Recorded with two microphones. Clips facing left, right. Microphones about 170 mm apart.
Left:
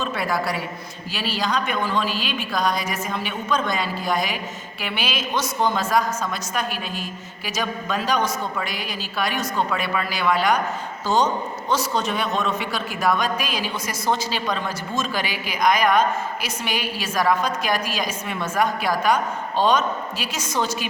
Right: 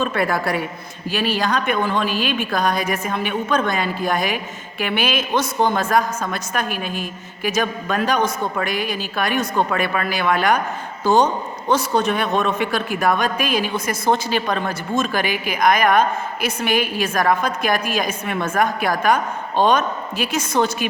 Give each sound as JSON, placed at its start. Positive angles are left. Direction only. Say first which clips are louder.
{"t": 0.0, "sound": "a woman's voice", "louder": "right 4 dB", "side_deg": -55}